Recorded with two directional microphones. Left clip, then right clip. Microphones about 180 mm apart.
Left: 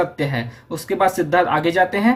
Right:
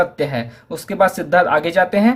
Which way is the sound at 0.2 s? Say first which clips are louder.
Right 3 dB; 50° right (ahead or behind).